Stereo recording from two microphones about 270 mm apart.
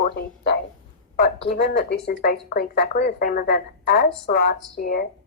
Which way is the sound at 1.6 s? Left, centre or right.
Left.